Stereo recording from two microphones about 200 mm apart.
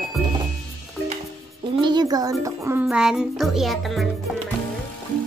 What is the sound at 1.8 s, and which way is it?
Speech, 20° right (ahead or behind).